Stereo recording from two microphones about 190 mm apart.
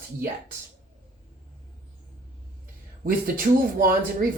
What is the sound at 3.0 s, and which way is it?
Speech, 50° right (ahead or behind).